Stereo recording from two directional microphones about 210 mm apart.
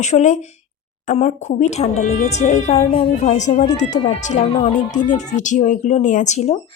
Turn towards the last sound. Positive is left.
turn(degrees=30)  # may be behind; listen again after turning